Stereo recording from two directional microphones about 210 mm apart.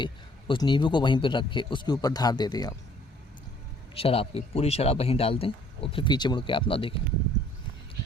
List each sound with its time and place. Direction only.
0.0 s a man's voice: 20° left (ahead or behind)
3.9 s a man's voice: 25° left (ahead or behind)